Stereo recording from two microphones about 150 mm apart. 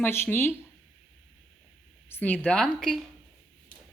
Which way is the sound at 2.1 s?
10° left (ahead or behind).